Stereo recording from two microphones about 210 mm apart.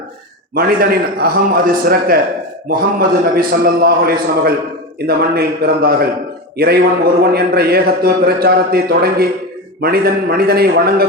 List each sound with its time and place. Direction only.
0.5 s a man's voice: 45° right (ahead or behind)
3.3 s a man's voice: 45° right (ahead or behind)